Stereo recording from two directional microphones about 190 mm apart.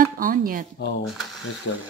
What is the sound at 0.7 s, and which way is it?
Speech, 65° left (ahead or behind).